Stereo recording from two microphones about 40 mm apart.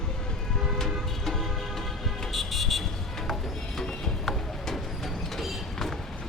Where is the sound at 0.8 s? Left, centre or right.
Centre.